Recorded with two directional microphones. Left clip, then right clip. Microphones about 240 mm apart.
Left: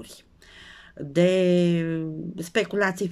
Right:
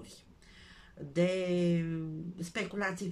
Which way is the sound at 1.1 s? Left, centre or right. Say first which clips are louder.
Left 11 dB; left.